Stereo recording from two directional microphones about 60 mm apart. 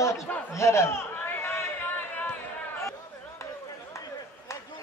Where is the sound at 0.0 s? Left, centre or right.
Left.